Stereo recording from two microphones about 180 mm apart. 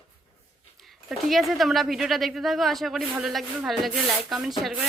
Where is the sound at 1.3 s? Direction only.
Centre (ahead or behind).